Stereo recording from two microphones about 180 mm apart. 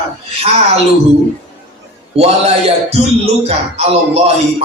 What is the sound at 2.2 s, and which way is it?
Music, 35° right (ahead or behind).